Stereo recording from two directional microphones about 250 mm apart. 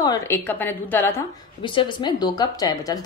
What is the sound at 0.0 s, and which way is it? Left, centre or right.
A woman's voice, centre.